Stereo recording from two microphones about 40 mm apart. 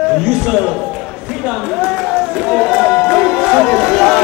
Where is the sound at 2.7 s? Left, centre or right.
Right.